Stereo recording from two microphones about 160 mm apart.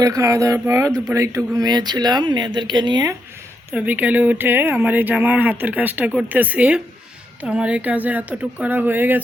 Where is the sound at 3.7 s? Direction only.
10° right (ahead or behind).